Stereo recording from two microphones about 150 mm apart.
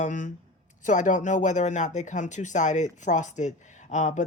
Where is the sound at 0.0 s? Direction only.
60° left (ahead or behind).